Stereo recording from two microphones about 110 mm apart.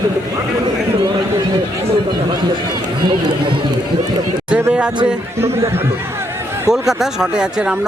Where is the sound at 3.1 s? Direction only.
50° right (ahead or behind).